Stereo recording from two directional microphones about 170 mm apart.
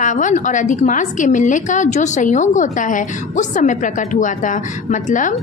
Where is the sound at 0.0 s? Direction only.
45° left (ahead or behind).